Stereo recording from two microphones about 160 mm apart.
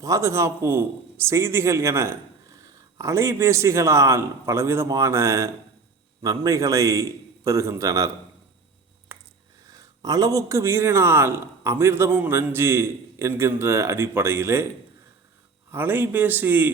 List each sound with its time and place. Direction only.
0.0 s a man's voice: 20° right (ahead or behind)
9.1 s a sound: 15° right (ahead or behind)
9.6 s a man's voice: 20° right (ahead or behind)
15.7 s a man's voice: 10° right (ahead or behind)